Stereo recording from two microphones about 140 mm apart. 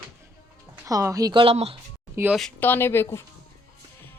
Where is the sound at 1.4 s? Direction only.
45° right (ahead or behind).